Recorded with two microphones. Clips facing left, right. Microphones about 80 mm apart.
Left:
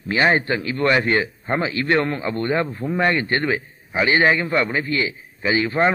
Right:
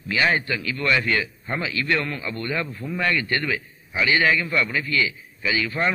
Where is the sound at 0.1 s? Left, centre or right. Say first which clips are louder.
Left 4 dB; left.